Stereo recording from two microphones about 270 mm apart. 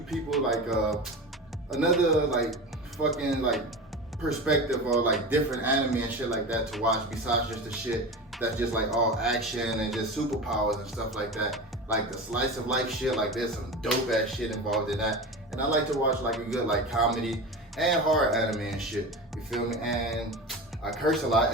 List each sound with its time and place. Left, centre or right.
0.1 s speech: centre